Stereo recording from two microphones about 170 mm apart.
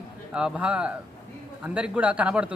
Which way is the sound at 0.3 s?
5° right (ahead or behind).